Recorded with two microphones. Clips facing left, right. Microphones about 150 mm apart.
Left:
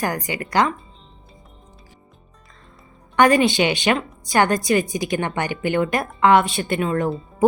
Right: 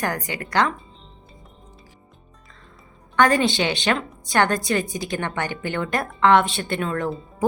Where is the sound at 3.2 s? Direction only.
15° left (ahead or behind).